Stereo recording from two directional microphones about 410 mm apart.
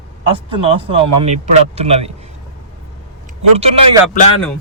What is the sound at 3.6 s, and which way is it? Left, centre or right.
Speech, centre.